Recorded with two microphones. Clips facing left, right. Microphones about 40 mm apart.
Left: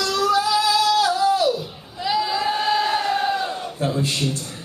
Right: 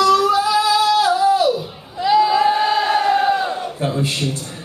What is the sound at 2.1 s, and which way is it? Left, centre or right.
Crowd, centre.